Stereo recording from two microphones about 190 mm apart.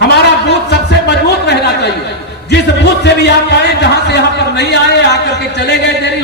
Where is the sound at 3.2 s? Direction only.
65° left (ahead or behind).